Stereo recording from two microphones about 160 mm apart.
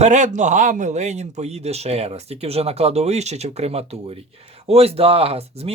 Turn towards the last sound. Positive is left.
turn(degrees=-40)  # may be behind; listen again after turning